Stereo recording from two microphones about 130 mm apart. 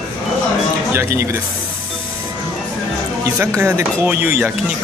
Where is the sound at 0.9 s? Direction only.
20° right (ahead or behind).